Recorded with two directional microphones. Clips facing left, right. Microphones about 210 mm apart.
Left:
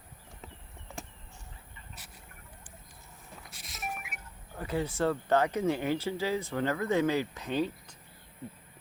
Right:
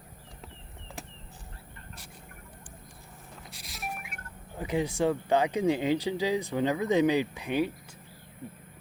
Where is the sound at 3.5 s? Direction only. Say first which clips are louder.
Even; centre (ahead or behind).